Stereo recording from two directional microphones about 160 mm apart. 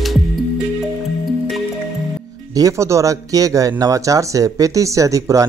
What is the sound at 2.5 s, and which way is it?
Speech, 20° right (ahead or behind).